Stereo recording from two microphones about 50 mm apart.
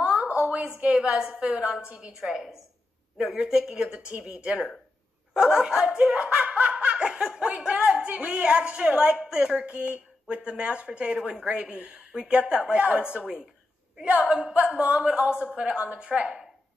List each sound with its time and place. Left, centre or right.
0.2 s a sound: right
0.7 s speech: right
2.1 s speech: centre; by 16.4 s right